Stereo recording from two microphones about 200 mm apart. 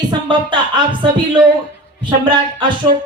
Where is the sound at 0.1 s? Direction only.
25° right (ahead or behind).